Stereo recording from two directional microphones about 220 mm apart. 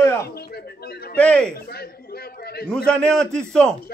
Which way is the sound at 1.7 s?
45° left (ahead or behind).